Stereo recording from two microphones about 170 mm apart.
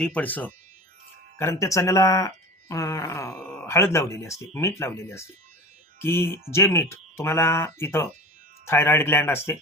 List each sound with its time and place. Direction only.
0.0 s speech: 10° left (ahead or behind)